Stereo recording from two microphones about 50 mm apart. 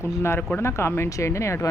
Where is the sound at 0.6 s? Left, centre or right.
Left.